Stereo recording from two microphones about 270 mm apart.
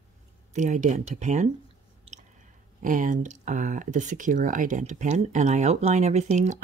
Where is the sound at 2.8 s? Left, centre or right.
Right.